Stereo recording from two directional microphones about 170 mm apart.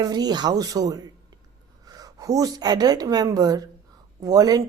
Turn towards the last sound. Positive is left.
turn(degrees=-20)  # may be behind; listen again after turning